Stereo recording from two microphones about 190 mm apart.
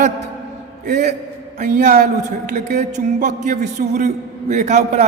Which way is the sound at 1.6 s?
40° right (ahead or behind).